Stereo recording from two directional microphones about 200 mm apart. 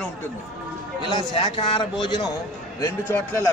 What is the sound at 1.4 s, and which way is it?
Speech, 25° left (ahead or behind).